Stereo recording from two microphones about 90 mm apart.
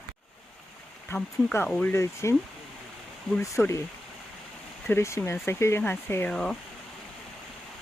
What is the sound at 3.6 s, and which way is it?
Speech, 25° left (ahead or behind).